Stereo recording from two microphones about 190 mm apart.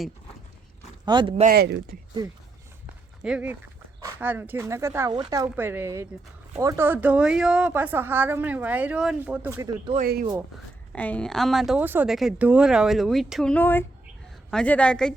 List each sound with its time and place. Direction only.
1.0 s speech: 25° right (ahead or behind)
1.4 s speech: 50° right (ahead or behind)
3.2 s a woman's voice: 5° right (ahead or behind)
10.0 s speech: 50° right (ahead or behind)
10.9 s speech: 5° left (ahead or behind)